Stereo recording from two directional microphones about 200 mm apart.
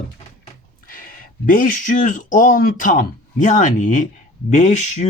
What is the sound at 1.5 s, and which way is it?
Speech, 45° left (ahead or behind).